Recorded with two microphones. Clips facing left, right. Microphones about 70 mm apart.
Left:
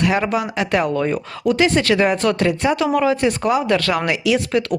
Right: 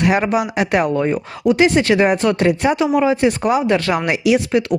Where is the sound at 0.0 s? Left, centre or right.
Right.